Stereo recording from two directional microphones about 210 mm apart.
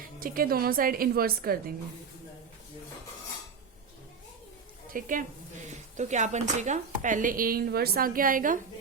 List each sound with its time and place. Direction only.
0.2 s a woman's voice: 45° right (ahead or behind)
4.9 s speech: 40° right (ahead or behind)